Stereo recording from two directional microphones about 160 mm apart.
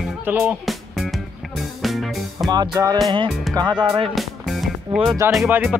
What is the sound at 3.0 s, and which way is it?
Speech, 30° right (ahead or behind).